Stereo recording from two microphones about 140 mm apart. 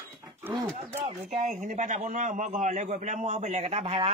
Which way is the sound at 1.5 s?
60° right (ahead or behind).